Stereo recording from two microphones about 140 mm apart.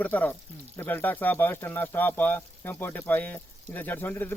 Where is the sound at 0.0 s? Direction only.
10° left (ahead or behind).